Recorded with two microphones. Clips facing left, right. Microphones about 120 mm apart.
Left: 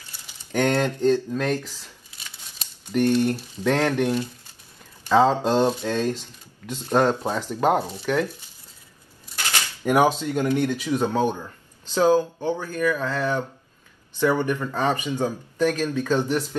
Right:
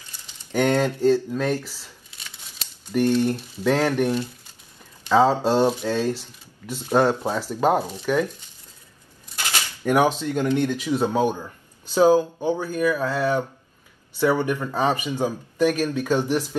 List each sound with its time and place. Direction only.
0.5 s speech: 10° right (ahead or behind)
2.9 s speech: 10° right (ahead or behind)
5.0 s speech: 10° right (ahead or behind)
9.8 s speech: 10° left (ahead or behind)
10.8 s speech: 10° right (ahead or behind)